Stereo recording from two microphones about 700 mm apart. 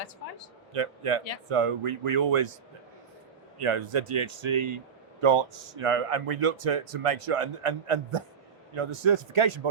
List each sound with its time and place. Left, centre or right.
0.7 s a man's voice: right
3.6 s a man's voice: right